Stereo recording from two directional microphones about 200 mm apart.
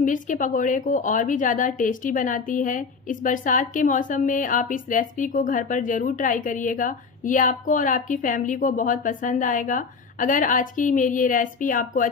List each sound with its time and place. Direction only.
0.0 s a woman's voice: 40° left (ahead or behind)